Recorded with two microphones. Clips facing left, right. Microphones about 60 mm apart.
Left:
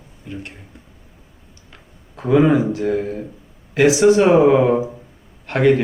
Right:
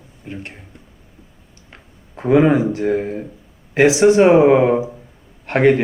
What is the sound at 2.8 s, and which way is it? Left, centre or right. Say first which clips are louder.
Speech: right 1 dB; centre.